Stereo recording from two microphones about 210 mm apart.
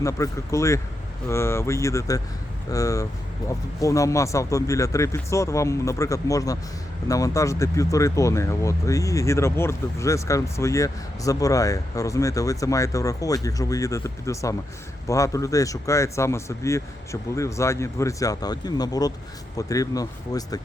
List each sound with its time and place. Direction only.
0.0 s speech: 15° left (ahead or behind)